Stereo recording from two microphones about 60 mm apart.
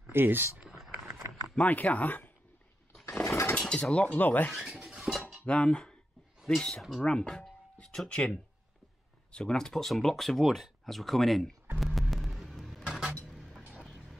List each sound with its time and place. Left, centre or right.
0.1 s speech: right
0.7 s a sound: centre
1.6 s speech: left
3.3 s dishes: left
3.5 s speech: centre
5.1 s cutlery: centre
5.4 s speech: centre
11.8 s vehicle: centre
13.3 s music: centre